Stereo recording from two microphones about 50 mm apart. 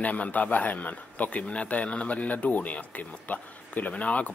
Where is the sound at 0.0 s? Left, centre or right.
Left.